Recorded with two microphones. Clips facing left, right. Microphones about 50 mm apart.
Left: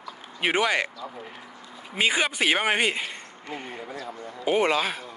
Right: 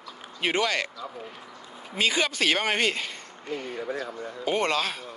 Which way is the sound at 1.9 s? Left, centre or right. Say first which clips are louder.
Left 1 dB; left.